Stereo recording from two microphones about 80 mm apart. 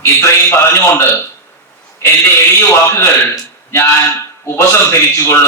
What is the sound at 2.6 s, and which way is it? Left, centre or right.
A man's voice, left.